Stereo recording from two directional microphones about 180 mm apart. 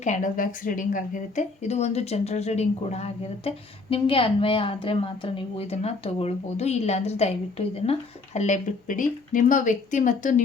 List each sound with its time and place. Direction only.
0.0 s a woman's voice: 45° left (ahead or behind)